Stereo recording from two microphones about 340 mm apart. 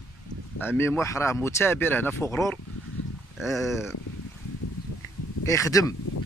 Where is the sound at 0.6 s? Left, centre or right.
Centre.